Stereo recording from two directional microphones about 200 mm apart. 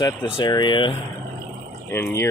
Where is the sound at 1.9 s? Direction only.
15° left (ahead or behind).